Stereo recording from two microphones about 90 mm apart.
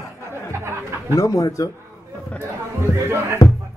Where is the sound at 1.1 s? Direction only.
40° left (ahead or behind).